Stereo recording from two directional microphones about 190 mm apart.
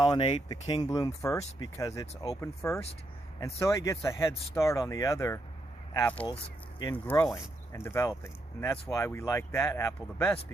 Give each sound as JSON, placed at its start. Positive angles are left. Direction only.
{"t": 0.0, "sound": "speech", "side_deg": 25}